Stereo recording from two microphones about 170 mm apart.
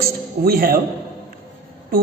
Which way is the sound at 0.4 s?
60° right (ahead or behind).